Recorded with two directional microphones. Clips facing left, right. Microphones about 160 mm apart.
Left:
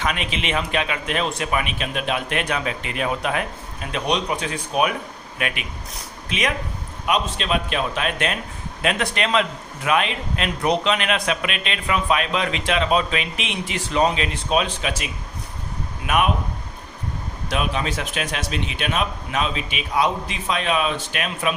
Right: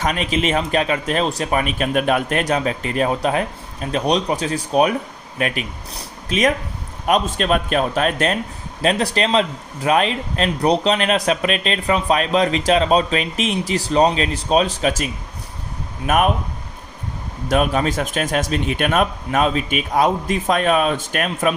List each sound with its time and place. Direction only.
0.0 s a man's voice: 40° right (ahead or behind)
17.5 s speech: 45° right (ahead or behind)